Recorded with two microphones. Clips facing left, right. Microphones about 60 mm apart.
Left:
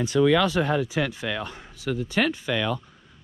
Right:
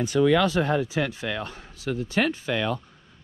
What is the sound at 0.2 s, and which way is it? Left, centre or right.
Speech, left.